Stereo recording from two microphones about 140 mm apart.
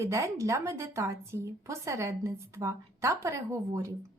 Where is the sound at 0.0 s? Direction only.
20° right (ahead or behind).